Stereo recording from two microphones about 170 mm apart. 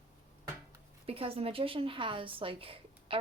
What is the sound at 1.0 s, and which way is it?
Speech, 35° right (ahead or behind).